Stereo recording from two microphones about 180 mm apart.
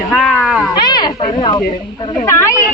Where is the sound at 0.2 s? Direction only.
Centre (ahead or behind).